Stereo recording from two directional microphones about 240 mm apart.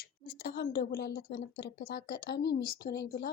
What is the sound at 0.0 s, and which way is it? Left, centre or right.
A woman's voice, left.